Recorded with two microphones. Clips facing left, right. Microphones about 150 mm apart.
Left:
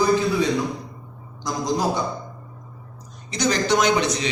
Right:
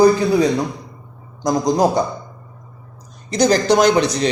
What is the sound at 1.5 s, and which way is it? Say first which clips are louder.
Speech: right 8 dB; 40° right (ahead or behind).